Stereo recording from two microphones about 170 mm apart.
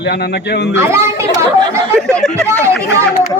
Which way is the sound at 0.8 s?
15° right (ahead or behind).